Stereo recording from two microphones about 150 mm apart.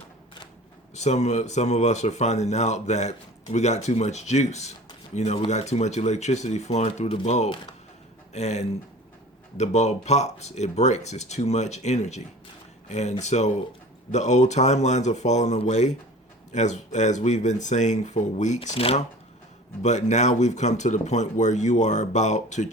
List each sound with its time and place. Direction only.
0.9 s speech: 50° left (ahead or behind)
18.7 s speech: 40° left (ahead or behind)
19.8 s speech: 50° left (ahead or behind)